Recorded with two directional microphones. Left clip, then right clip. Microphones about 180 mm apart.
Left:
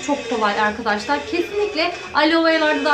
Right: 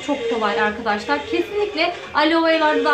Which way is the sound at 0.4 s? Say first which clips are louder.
Left 3 dB; 10° left (ahead or behind).